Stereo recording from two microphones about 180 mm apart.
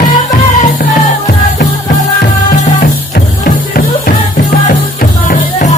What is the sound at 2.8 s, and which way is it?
Music, 50° left (ahead or behind).